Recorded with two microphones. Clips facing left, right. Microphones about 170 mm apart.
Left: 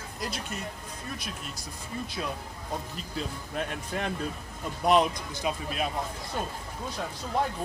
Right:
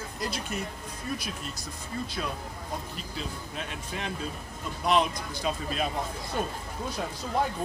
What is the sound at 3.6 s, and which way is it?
Speech, 55° left (ahead or behind).